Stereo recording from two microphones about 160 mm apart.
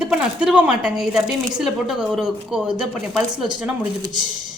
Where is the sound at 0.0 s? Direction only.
5° right (ahead or behind).